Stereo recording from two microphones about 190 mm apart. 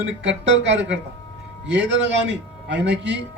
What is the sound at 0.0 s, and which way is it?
A man's voice, 75° right (ahead or behind).